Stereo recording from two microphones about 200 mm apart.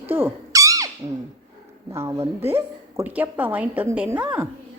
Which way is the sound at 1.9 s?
15° right (ahead or behind).